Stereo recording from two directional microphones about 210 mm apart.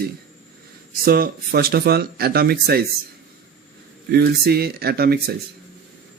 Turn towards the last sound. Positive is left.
turn(degrees=-50)  # may be behind; listen again after turning